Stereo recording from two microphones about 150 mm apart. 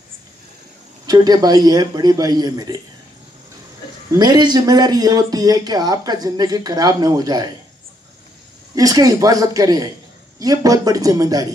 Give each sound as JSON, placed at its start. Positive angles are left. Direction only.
{"t": 1.0, "sound": "a man's voice", "side_deg": -25}
{"t": 4.1, "sound": "a man's voice", "side_deg": -30}
{"t": 8.7, "sound": "a man's voice", "side_deg": -25}